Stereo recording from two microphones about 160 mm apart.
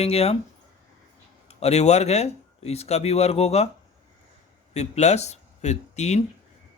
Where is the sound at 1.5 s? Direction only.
40° left (ahead or behind).